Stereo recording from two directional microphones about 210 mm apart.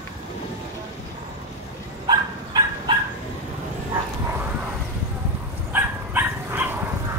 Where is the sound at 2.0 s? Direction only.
20° right (ahead or behind).